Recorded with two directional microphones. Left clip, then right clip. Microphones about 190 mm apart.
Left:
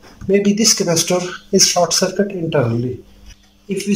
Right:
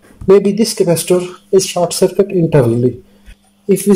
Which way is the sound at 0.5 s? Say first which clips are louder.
Right 2 dB; 15° right (ahead or behind).